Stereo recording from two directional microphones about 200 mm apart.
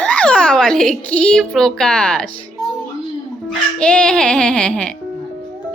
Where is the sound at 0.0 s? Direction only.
5° left (ahead or behind).